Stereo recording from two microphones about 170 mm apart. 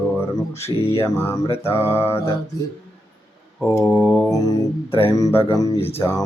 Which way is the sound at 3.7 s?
20° left (ahead or behind).